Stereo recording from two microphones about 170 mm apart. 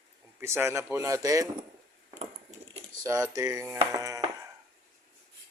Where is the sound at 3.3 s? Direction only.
20° right (ahead or behind).